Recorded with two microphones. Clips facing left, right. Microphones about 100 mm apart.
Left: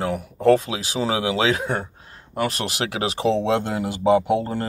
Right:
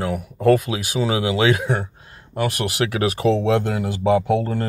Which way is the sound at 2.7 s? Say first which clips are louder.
Right 4 dB; 25° left (ahead or behind).